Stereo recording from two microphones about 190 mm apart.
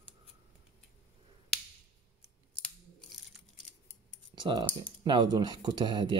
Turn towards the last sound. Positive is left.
turn(degrees=-25)  # may be behind; listen again after turning